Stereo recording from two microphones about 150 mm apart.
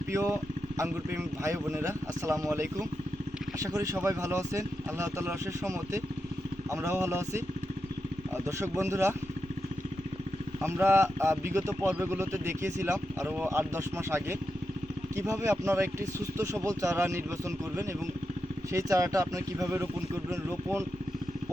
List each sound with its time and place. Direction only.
0.1 s speech: 20° right (ahead or behind)
8.4 s speech: 20° right (ahead or behind)
10.6 s speech: 15° right (ahead or behind)
18.7 s speech: 20° right (ahead or behind)